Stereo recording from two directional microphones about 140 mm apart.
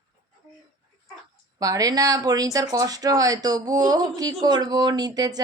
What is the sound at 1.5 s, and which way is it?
Speech, 25° right (ahead or behind).